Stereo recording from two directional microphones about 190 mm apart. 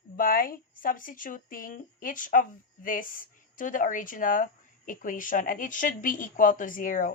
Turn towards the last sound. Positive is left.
turn(degrees=45)  # may be behind; listen again after turning